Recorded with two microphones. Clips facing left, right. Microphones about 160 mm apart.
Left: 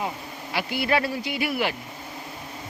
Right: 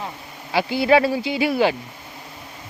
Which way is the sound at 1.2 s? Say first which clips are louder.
Right 6 dB; 25° right (ahead or behind).